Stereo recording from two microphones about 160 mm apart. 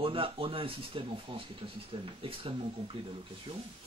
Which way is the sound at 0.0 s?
35° right (ahead or behind).